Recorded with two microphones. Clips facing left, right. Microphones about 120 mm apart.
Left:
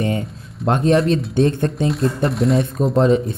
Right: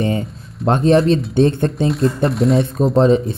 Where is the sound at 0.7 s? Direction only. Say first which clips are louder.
Right 3 dB; 30° right (ahead or behind).